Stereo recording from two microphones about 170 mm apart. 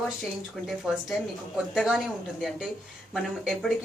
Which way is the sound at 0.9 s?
5° right (ahead or behind).